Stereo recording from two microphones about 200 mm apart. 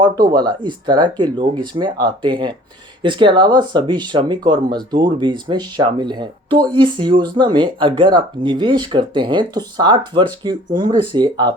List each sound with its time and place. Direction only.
0.0 s speech: 20° right (ahead or behind)